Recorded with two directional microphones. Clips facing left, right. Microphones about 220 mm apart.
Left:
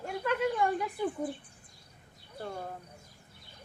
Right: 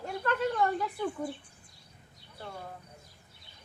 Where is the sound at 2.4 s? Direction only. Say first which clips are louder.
Left 4 dB; 45° left (ahead or behind).